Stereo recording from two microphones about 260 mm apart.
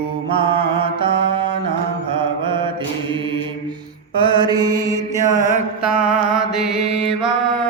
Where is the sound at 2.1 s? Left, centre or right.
Centre.